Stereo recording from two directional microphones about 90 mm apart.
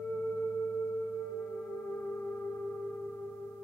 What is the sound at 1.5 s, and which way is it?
Singing bowl, 20° left (ahead or behind).